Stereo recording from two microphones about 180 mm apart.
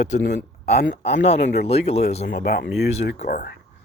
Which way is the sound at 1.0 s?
35° left (ahead or behind).